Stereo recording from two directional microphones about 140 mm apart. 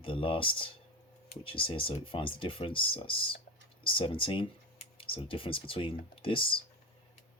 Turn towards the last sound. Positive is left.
turn(degrees=40)  # may be behind; listen again after turning